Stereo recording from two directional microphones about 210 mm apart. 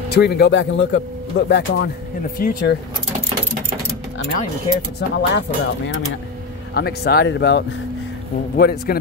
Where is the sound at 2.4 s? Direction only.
45° left (ahead or behind).